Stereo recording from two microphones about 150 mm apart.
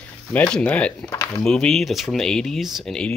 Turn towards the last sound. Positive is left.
turn(degrees=5)  # may be behind; listen again after turning